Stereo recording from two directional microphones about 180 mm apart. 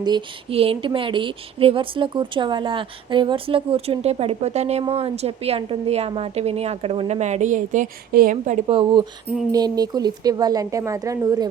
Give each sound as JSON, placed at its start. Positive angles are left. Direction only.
{"t": 0.0, "sound": "speech", "side_deg": -30}
{"t": 8.6, "sound": "speech", "side_deg": -30}